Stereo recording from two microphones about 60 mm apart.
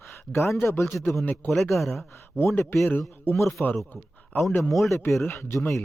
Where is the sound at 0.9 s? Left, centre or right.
Left.